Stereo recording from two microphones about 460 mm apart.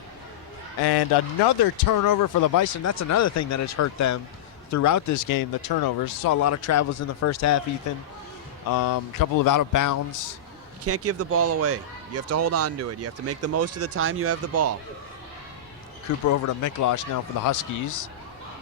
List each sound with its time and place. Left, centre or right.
0.8 s a man's voice: left
8.7 s speech: left
10.8 s speech: right
16.1 s speech: left